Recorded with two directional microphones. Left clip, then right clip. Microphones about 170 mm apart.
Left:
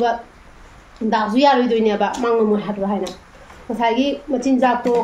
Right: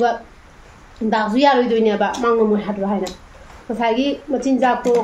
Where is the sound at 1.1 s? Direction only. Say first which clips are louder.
Even; 5° left (ahead or behind).